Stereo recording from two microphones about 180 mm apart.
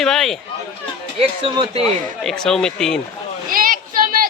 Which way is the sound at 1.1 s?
30° right (ahead or behind).